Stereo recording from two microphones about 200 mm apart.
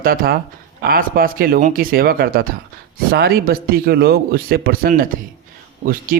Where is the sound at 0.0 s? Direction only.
45° right (ahead or behind).